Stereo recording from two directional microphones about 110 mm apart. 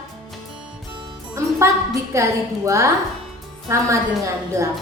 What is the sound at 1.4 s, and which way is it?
Music, 25° right (ahead or behind).